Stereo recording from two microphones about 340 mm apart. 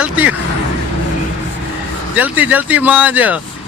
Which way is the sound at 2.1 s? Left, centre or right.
Centre.